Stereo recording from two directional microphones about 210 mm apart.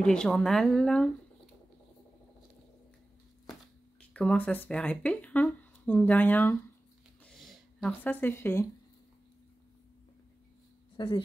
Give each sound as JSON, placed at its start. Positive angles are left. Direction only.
{"t": 0.0, "sound": "speech", "side_deg": 5}
{"t": 4.1, "sound": "speech", "side_deg": 5}
{"t": 7.2, "sound": "a sound", "side_deg": 0}
{"t": 11.0, "sound": "speech", "side_deg": 25}